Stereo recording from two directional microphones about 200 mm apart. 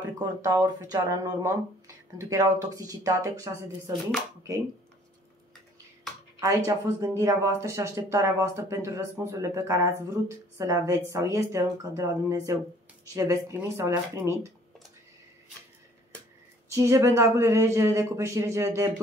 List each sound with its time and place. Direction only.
0.2 s speech: 15° right (ahead or behind)
6.4 s speech: 15° right (ahead or behind)
16.7 s speech: 15° right (ahead or behind)